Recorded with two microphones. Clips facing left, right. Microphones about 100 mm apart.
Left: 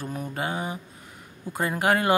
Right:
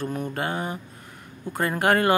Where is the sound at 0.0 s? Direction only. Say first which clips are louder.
Right 3 dB; 5° left (ahead or behind).